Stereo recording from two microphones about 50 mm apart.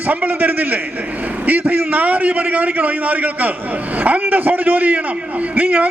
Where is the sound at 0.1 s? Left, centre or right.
Right.